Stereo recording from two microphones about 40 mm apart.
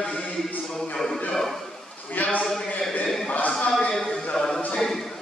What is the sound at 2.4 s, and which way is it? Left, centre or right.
Speech, centre.